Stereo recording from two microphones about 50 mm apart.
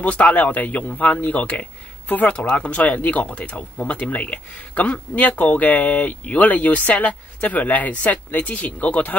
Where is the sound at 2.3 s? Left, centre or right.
Left.